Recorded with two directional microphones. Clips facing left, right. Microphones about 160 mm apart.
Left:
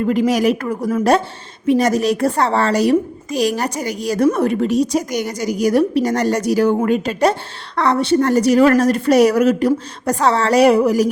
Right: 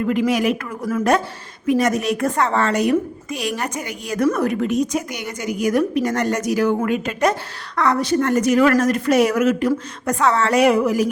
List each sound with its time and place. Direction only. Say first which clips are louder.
0.0 s a woman's voice: left 3 dB; 35° left (ahead or behind)